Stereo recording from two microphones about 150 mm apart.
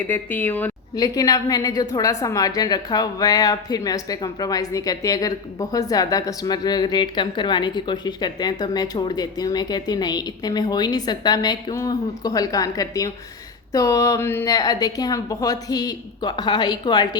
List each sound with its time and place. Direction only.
0.0 s speech: 15° left (ahead or behind)
0.9 s a woman's voice: 25° left (ahead or behind)